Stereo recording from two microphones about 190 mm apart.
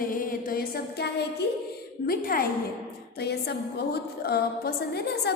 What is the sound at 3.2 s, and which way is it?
A woman's voice, 60° left (ahead or behind).